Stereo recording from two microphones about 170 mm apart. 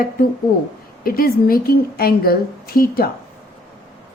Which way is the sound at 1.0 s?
60° left (ahead or behind).